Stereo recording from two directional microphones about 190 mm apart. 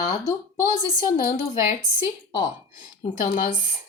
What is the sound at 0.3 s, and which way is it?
Speech, 20° left (ahead or behind).